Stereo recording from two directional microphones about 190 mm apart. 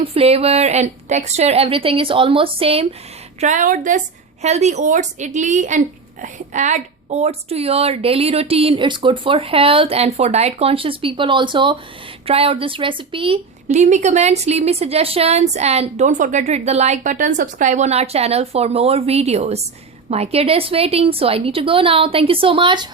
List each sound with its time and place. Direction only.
0.0 s a woman's voice: 30° right (ahead or behind)
3.4 s a woman's voice: 40° right (ahead or behind); by 22.9 s 25° right (ahead or behind)